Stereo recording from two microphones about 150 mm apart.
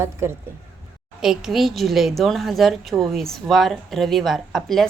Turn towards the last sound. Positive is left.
turn(degrees=0)  # may be behind; listen again after turning